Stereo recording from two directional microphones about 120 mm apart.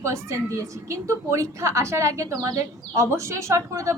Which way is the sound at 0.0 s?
25° right (ahead or behind).